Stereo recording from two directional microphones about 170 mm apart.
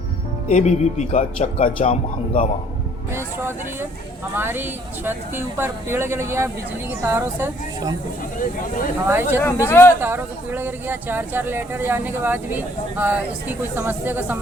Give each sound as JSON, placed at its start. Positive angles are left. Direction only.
{"t": 0.4, "sound": "speech", "side_deg": 45}
{"t": 3.2, "sound": "speech", "side_deg": -15}
{"t": 9.0, "sound": "speech", "side_deg": -10}
{"t": 9.4, "sound": "speech", "side_deg": 15}
{"t": 10.0, "sound": "speech", "side_deg": -10}